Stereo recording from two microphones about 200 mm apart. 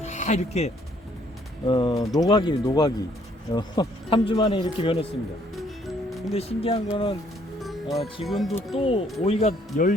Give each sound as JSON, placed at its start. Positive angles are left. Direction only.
{"t": 0.0, "sound": "music", "side_deg": 35}
{"t": 1.6, "sound": "speech", "side_deg": 25}
{"t": 5.5, "sound": "music", "side_deg": 0}
{"t": 6.3, "sound": "speech", "side_deg": 30}
{"t": 7.6, "sound": "speech", "side_deg": 0}
{"t": 8.7, "sound": "speech", "side_deg": 30}